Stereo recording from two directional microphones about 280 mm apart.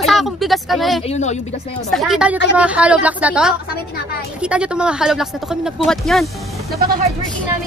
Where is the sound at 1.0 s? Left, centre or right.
Left.